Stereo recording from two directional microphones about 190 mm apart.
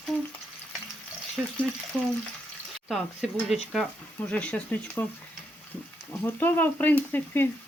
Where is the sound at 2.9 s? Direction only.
Centre (ahead or behind).